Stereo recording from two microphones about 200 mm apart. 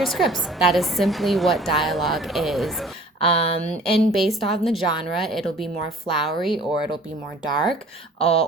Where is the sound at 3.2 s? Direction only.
30° left (ahead or behind).